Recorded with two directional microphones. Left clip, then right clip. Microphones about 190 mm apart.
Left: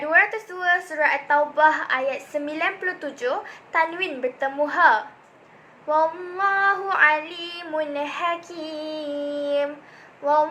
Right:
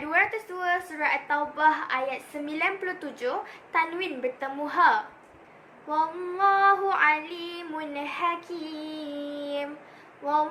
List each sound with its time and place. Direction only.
0.1 s a woman's voice: 15° right (ahead or behind)